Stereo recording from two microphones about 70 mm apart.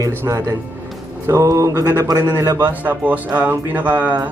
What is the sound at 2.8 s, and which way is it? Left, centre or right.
Speech, right.